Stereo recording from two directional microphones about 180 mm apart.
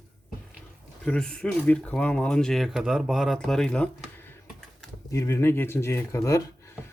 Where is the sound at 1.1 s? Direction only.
5° left (ahead or behind).